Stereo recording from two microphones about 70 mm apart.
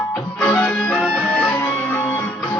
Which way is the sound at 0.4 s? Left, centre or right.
Centre.